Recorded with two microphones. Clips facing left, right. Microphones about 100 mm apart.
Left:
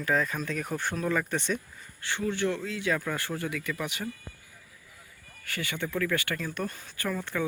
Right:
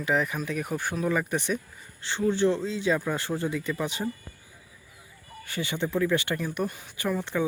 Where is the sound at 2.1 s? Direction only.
30° right (ahead or behind).